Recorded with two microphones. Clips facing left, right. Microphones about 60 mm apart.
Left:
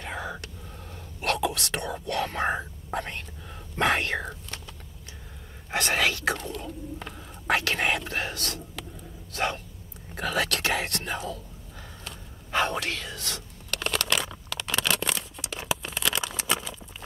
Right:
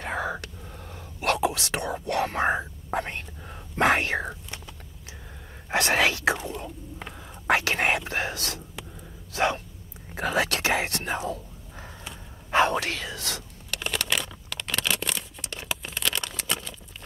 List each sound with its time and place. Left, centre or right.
0.0 s whispering: right
1.4 s whispering: centre
1.8 s speech: centre
2.0 s speech: right
2.9 s speech: right; by 4.6 s centre
5.7 s speech: right
6.3 s speech: centre
7.4 s speech: right
12.4 s speech: right
13.7 s a sound: centre